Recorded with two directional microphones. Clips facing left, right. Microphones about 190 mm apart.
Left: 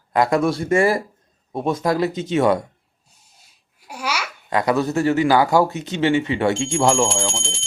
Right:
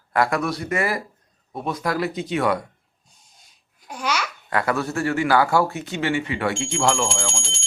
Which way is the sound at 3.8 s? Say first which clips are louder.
Right 1 dB; 10° left (ahead or behind).